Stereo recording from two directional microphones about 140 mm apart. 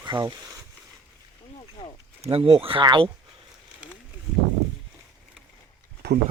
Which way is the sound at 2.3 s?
45° right (ahead or behind).